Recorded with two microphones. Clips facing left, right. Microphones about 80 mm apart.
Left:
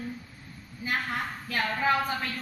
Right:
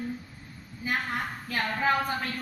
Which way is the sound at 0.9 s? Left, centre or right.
Centre.